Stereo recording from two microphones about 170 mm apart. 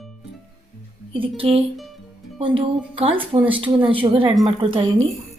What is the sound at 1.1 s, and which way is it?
Speech, 30° right (ahead or behind).